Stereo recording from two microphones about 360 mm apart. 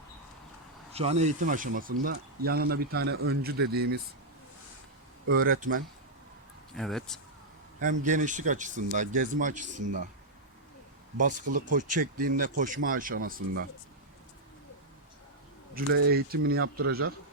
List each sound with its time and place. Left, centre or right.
0.9 s speech: centre
5.3 s speech: right
6.7 s speech: centre
7.8 s speech: right
11.5 s speech: right
16.0 s speech: right